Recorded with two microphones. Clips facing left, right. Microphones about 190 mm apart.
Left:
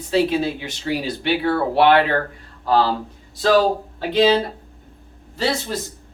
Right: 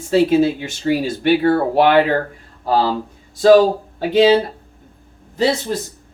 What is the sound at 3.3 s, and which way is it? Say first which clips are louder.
Speech: right 7 dB; 45° right (ahead or behind).